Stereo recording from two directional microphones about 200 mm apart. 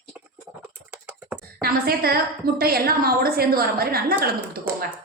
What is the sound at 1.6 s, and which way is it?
A woman's voice, 50° right (ahead or behind).